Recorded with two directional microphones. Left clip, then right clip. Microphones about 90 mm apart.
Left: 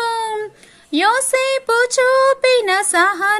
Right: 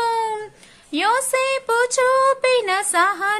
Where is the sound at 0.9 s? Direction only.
45° left (ahead or behind).